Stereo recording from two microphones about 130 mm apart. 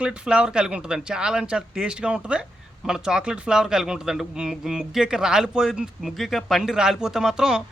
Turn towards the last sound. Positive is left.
turn(degrees=-5)  # may be behind; listen again after turning